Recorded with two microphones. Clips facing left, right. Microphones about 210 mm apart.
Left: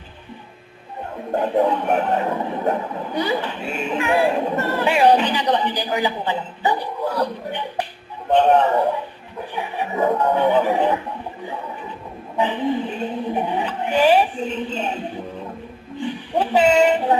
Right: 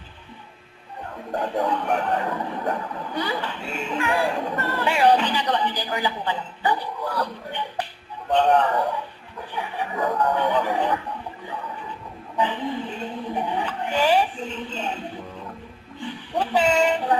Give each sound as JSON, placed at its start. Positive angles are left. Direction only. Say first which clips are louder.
{"t": 1.3, "sound": "speech", "louder": "left 6 dB", "side_deg": 20}
{"t": 12.4, "sound": "speech", "louder": "left 5 dB", "side_deg": 20}